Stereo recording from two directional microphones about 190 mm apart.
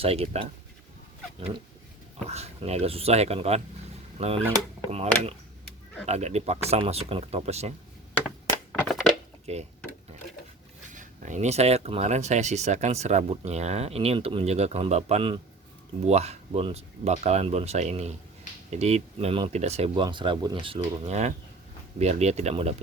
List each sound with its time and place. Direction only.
0.0 s speech: 30° right (ahead or behind)
2.2 s speech: 35° right (ahead or behind)
9.5 s speech: 35° right (ahead or behind)
10.9 s speech: 40° right (ahead or behind)